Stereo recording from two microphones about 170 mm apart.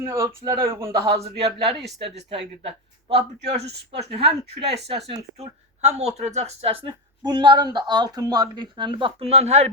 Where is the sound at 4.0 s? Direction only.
35° right (ahead or behind).